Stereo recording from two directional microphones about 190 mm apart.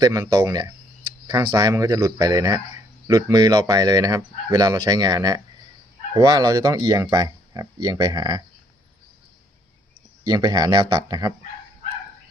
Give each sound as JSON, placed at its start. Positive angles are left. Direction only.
{"t": 0.0, "sound": "speech", "side_deg": -20}
{"t": 10.2, "sound": "speech", "side_deg": -20}